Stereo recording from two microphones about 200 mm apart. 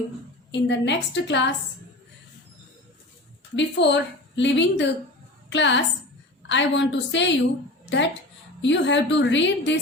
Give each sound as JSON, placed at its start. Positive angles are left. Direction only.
{"t": 0.5, "sound": "a woman's voice", "side_deg": 65}
{"t": 3.5, "sound": "a woman's voice", "side_deg": 60}